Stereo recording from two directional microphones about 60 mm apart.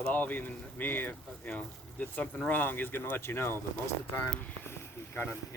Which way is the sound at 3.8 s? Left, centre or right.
Left.